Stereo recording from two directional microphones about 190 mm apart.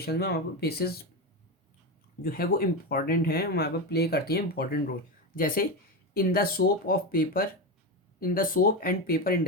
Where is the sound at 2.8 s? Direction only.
55° left (ahead or behind).